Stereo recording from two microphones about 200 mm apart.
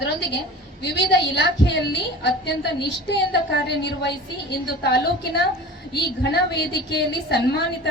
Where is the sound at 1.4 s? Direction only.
60° left (ahead or behind).